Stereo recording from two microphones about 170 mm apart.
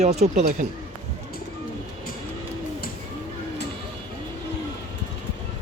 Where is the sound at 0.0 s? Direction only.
40° right (ahead or behind).